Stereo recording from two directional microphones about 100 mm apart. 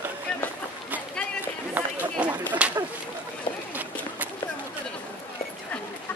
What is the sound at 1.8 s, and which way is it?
Run, 15° right (ahead or behind).